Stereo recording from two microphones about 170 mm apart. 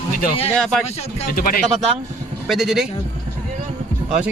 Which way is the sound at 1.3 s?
60° left (ahead or behind).